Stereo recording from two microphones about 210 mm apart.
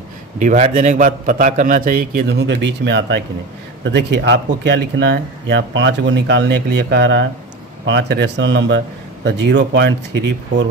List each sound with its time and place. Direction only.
0.4 s a man's voice: 35° right (ahead or behind); by 10.3 s 55° right (ahead or behind)